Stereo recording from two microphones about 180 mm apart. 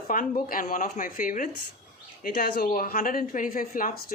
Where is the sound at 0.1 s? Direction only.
50° left (ahead or behind).